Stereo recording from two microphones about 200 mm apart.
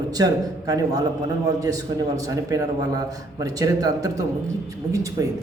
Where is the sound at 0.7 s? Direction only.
15° right (ahead or behind).